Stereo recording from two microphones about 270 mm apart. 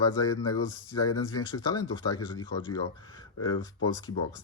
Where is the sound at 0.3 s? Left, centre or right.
Centre.